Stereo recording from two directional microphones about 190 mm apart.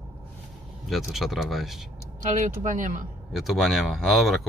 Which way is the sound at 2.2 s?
40° right (ahead or behind).